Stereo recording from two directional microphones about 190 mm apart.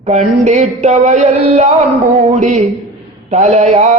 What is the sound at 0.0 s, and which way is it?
A man's voice, 35° right (ahead or behind).